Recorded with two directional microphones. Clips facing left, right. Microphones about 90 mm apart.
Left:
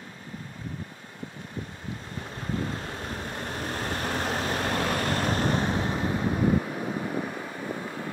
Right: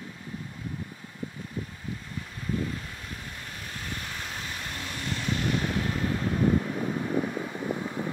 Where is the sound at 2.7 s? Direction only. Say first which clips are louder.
Left 4 dB; 50° left (ahead or behind); by 8.0 s 15° left (ahead or behind).